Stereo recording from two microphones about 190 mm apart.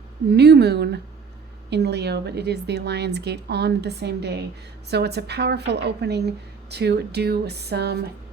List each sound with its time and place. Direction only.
0.3 s a woman's voice: 60° right (ahead or behind)